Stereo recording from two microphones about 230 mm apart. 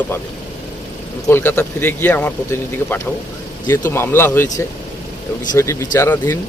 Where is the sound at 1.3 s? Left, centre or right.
Centre.